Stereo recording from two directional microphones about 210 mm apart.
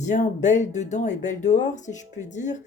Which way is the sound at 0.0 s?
35° left (ahead or behind).